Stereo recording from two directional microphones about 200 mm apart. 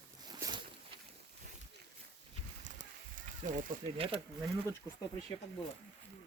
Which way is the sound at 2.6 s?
40° right (ahead or behind).